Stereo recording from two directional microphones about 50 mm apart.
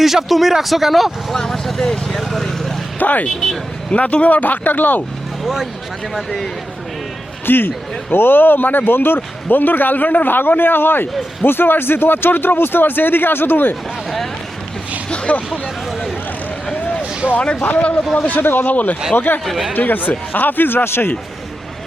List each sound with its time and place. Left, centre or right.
0.0 s speech: centre
3.0 s speech: left
5.4 s a sound: centre
6.1 s speech: centre
7.4 s speech: left
15.1 s speech: left
17.0 s a sound: right
17.6 s speech: left
19.1 s speech: left
19.5 s speech: centre
19.7 s speech: left